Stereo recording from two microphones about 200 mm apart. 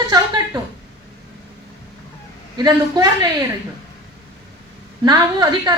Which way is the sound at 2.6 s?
20° right (ahead or behind).